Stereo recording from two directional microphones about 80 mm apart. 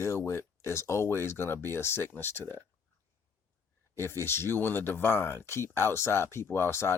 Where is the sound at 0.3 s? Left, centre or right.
Left.